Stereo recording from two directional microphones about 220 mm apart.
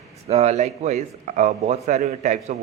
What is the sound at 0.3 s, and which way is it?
Speech, 30° right (ahead or behind).